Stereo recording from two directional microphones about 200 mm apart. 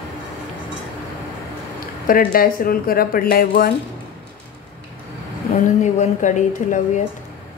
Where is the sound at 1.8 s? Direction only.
45° left (ahead or behind).